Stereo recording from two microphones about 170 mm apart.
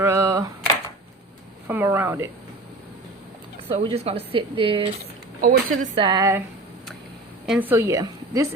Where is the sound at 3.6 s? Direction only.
35° right (ahead or behind).